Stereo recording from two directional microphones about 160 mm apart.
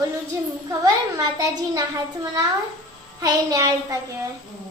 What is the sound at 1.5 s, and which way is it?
Speech, 25° right (ahead or behind).